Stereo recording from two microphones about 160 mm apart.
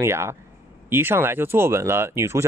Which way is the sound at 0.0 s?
15° right (ahead or behind).